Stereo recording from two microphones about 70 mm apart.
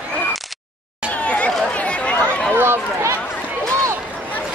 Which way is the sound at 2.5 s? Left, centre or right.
Right.